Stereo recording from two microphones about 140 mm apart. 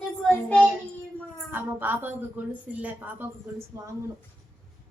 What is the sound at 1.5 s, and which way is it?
A woman's voice, 15° right (ahead or behind).